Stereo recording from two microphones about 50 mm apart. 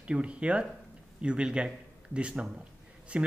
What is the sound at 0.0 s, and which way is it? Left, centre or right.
Speech, right.